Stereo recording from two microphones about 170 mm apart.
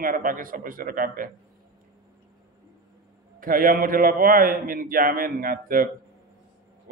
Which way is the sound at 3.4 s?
55° right (ahead or behind).